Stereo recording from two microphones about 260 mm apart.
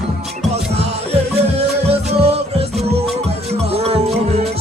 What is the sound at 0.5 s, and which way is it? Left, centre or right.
Music, right.